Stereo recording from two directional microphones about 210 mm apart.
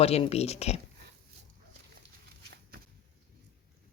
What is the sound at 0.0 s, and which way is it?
Speech, 30° left (ahead or behind).